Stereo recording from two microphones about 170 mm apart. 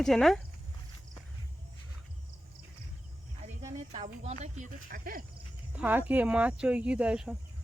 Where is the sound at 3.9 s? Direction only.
40° right (ahead or behind); by 5.2 s 60° right (ahead or behind).